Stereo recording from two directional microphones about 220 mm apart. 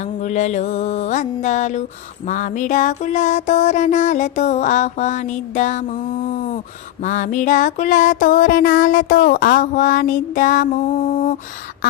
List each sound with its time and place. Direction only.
0.0 s music: 35° left (ahead or behind)